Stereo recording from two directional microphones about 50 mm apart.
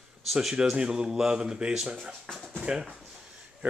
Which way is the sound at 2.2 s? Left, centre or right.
Centre.